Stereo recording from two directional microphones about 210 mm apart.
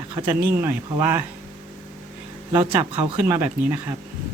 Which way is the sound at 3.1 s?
10° right (ahead or behind).